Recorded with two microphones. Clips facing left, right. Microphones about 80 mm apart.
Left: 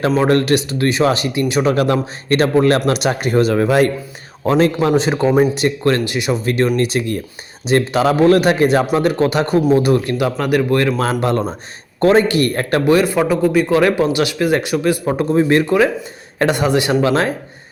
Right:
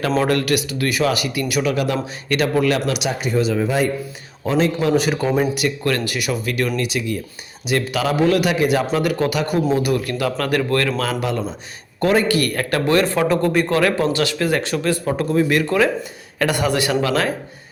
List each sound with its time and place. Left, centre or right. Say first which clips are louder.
0.3 s a man's voice: left 5 dB; left
1.7 s speech: left 5 dB; left
4.4 s speech: left 4 dB; left
4.9 s a man's voice: left 3 dB; left
11.0 s speech: left 5 dB; left
11.9 s a man's voice: left 4 dB; left
12.9 s speech: left 3 dB; centre
13.7 s a man's voice: left 4 dB; centre
15.6 s a man's voice: left 3 dB; centre